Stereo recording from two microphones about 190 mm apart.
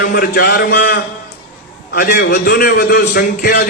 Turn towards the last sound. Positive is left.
turn(degrees=50)  # may be behind; listen again after turning